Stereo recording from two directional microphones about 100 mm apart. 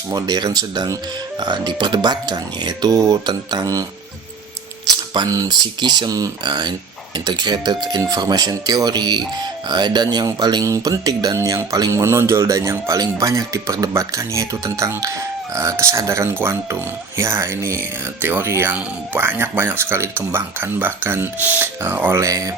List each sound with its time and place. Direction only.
0.1 s speech: 40° right (ahead or behind)
5.1 s speech: 40° right (ahead or behind)